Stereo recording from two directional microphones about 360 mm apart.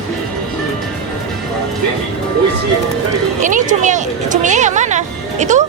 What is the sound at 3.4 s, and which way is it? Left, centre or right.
Speech, right.